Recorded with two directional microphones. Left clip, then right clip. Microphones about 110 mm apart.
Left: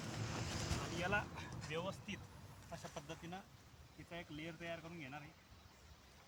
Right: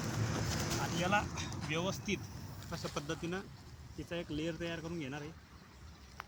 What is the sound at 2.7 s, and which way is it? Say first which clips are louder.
Speech: right 10 dB; 20° left (ahead or behind).